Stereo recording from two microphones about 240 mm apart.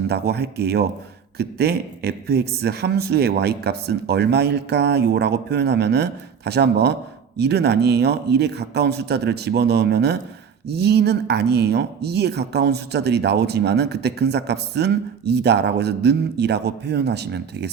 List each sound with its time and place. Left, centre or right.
0.1 s speech: right